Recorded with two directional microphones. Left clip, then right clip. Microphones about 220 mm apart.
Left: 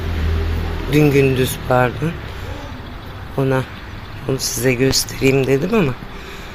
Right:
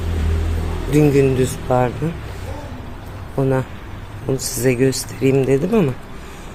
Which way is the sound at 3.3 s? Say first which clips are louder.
Left 1 dB; 10° right (ahead or behind).